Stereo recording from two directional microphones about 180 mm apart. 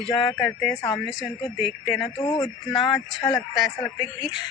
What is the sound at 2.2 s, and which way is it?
Speech, 20° left (ahead or behind).